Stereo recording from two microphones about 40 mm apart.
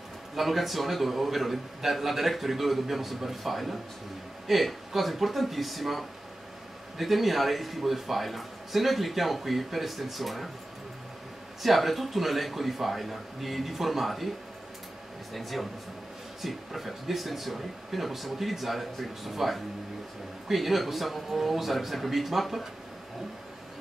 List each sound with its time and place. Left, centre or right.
0.4 s a man's voice: centre
11.6 s a man's voice: centre
16.3 s a man's voice: centre